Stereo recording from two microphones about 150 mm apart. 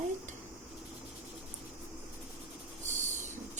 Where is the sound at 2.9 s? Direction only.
55° right (ahead or behind).